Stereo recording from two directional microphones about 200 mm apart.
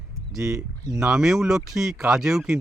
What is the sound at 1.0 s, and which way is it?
Speech, 5° right (ahead or behind).